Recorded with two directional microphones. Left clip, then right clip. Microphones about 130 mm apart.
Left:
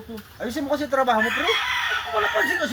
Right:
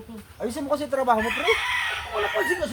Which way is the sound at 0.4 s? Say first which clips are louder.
Left 1 dB; 35° right (ahead or behind).